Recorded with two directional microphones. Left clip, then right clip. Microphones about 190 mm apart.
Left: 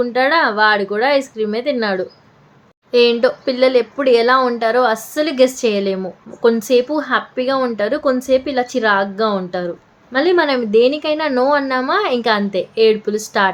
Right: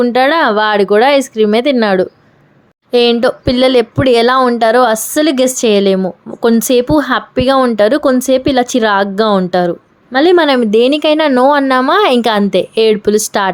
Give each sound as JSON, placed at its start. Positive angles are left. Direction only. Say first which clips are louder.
{"t": 0.0, "sound": "speech", "louder": "right 4 dB", "side_deg": -50}